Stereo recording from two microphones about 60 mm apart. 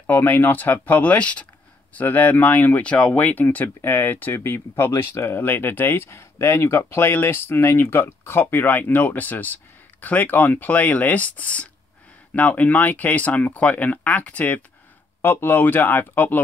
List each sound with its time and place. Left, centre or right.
0.0 s speech: left
3.2 s speech: left
4.4 s speech: left
15.2 s speech: left